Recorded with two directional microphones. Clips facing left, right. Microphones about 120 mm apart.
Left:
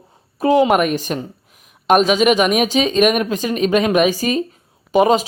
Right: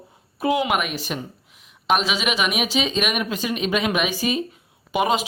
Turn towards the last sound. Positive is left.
turn(degrees=40)  # may be behind; listen again after turning